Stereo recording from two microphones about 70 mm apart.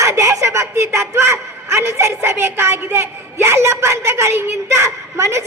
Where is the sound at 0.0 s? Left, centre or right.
Right.